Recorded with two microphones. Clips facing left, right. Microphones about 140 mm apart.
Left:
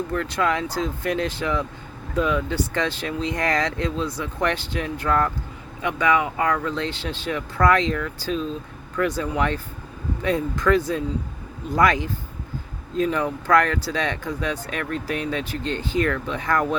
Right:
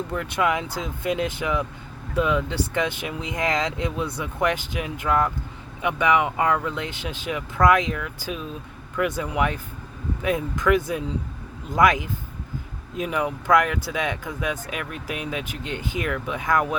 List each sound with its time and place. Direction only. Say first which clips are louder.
0.1 s speech: right 1 dB; 20° right (ahead or behind)
10.8 s speech: left 2 dB; 15° right (ahead or behind)